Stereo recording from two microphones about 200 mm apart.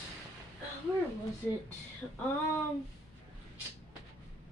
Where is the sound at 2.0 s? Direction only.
Centre (ahead or behind).